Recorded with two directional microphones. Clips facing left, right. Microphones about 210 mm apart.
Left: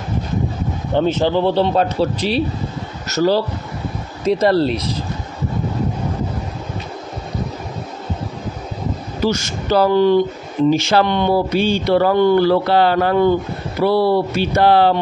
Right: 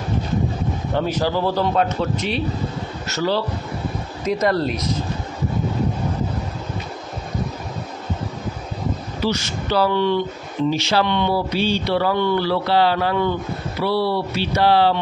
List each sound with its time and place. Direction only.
0.9 s a man's voice: 25° left (ahead or behind)
9.2 s speech: 45° left (ahead or behind)